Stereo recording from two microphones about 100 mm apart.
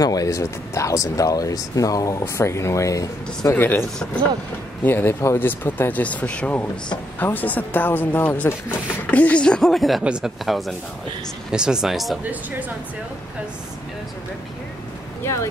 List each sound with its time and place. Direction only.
0.0 s speech: 35° left (ahead or behind)
3.5 s speech: 20° left (ahead or behind)
4.8 s speech: 20° left (ahead or behind); by 12.2 s centre (ahead or behind)
12.3 s speech: 15° right (ahead or behind)
15.2 s speech: 30° left (ahead or behind)